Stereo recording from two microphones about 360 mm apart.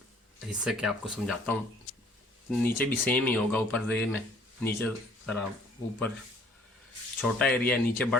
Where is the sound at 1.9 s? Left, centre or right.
Left.